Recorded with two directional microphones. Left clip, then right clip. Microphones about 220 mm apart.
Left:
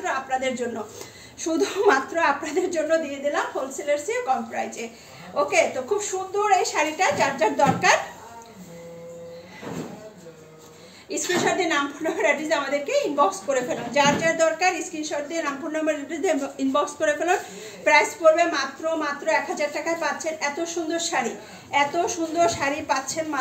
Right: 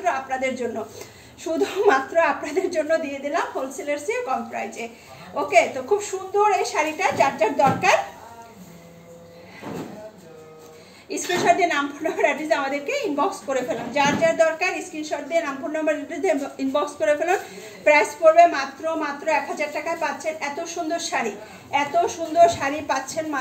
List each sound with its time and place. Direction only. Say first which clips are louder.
0.0 s a woman's voice: right 2 dB; 15° left (ahead or behind)
3.8 s a woman's voice: left 3 dB; 10° left (ahead or behind)
11.1 s a woman's voice: right 4 dB; 15° left (ahead or behind)